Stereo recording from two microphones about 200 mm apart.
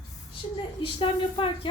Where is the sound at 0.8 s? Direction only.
25° left (ahead or behind).